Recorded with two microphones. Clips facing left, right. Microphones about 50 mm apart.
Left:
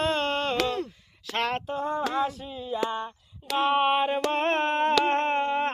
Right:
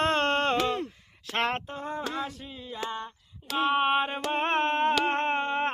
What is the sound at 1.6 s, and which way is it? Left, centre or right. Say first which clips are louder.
Female singing: left 6 dB; centre.